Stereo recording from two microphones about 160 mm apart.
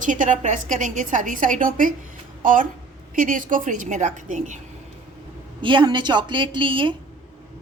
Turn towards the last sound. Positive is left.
turn(degrees=-30)  # may be behind; listen again after turning